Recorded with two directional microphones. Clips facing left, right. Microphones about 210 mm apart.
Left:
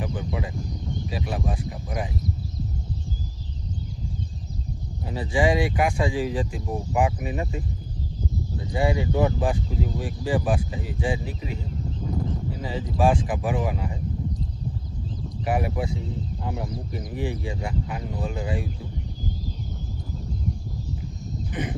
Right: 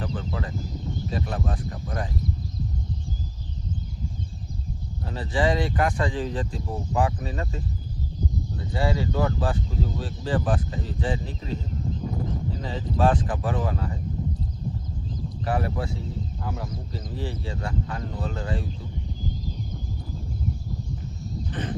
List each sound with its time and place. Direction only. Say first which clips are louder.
0.0 s a sound: left 1 dB; 15° left (ahead or behind)
1.1 s speech: left 1 dB; 10° left (ahead or behind)
5.0 s speech: left 2 dB; 10° left (ahead or behind)
15.4 s speech: left 2 dB; 15° left (ahead or behind)
21.5 s crow: left 2 dB; 10° left (ahead or behind)